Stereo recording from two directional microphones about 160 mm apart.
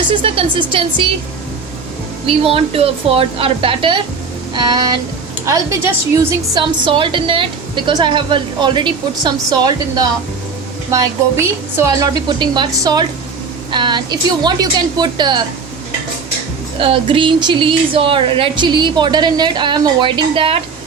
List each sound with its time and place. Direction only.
0.1 s speech: 35° right (ahead or behind)
2.2 s a woman's voice: 35° right (ahead or behind)
16.7 s speech: 35° right (ahead or behind)